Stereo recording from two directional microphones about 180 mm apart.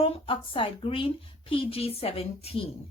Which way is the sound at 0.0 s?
30° left (ahead or behind).